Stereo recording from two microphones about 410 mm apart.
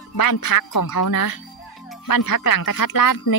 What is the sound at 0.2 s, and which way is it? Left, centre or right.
Speech, left.